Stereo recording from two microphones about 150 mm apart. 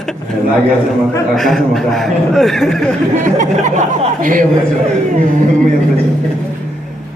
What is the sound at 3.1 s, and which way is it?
Speech, 60° right (ahead or behind).